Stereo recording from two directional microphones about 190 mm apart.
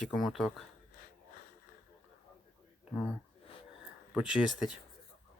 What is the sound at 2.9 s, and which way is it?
Speech, 5° right (ahead or behind).